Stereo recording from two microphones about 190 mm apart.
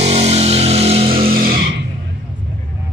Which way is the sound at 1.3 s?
50° right (ahead or behind).